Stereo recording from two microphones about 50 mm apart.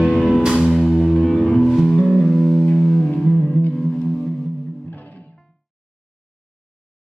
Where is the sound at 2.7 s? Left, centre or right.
Centre.